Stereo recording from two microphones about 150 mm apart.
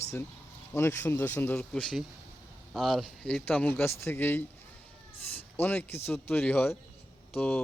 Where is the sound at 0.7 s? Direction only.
15° left (ahead or behind).